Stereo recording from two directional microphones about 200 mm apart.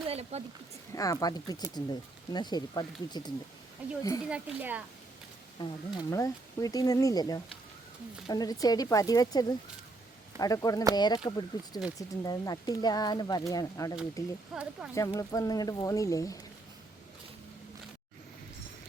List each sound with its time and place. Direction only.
0.1 s a sound: 30° right (ahead or behind)
0.9 s speech: 15° left (ahead or behind)
3.8 s speech: 5° right (ahead or behind)
5.5 s speech: 20° left (ahead or behind)
14.5 s speech: 5° right (ahead or behind)
14.9 s speech: 15° left (ahead or behind)